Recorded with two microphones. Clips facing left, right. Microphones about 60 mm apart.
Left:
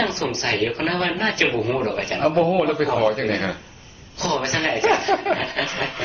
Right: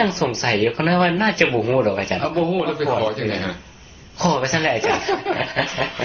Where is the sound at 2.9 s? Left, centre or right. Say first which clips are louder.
Left 2 dB; centre.